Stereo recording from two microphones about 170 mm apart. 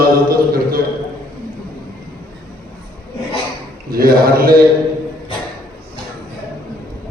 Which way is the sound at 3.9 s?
60° right (ahead or behind).